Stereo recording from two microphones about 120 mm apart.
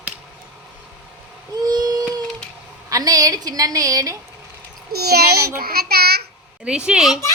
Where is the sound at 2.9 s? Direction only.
30° right (ahead or behind).